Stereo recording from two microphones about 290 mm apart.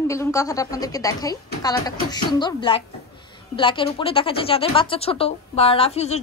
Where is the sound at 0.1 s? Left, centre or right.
Centre.